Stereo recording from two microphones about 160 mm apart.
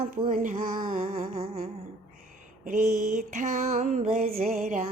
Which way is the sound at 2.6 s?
50° right (ahead or behind).